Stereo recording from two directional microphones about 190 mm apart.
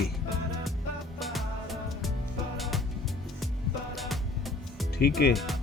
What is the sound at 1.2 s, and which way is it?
Music, centre (ahead or behind).